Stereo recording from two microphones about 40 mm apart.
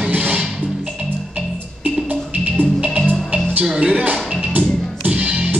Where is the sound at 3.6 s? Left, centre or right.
Right.